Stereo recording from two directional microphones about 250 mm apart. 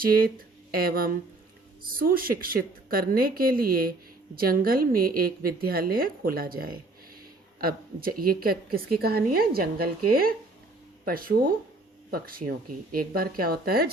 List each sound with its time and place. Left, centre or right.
0.0 s a woman's voice: right